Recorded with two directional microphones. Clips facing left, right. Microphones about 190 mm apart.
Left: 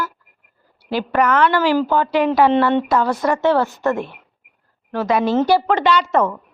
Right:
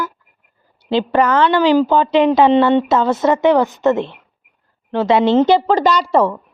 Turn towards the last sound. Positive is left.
turn(degrees=-30)  # may be behind; listen again after turning